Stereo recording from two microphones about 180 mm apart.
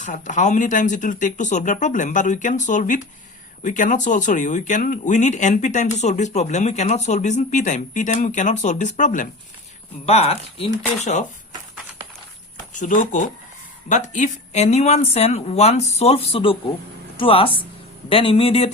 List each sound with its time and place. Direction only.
0.0 s speech: 45° left (ahead or behind)
12.7 s speech: 45° left (ahead or behind)